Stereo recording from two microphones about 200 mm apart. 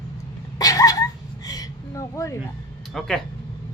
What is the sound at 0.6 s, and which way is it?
Dog, 15° left (ahead or behind).